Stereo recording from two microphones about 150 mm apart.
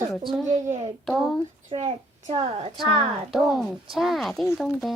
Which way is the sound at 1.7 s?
45° right (ahead or behind).